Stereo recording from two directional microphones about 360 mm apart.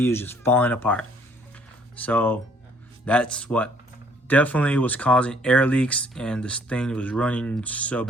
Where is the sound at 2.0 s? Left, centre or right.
Centre.